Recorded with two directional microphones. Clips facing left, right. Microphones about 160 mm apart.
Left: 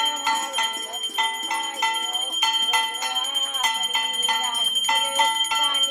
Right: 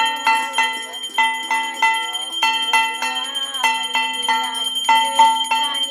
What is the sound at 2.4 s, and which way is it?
Music, 70° right (ahead or behind).